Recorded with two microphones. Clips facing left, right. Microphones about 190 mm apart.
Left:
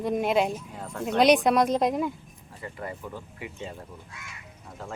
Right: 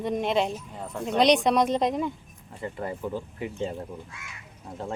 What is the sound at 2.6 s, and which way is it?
Speech, 30° right (ahead or behind).